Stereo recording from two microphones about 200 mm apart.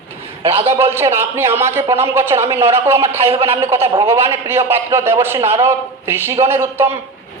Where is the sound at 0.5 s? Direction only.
30° right (ahead or behind).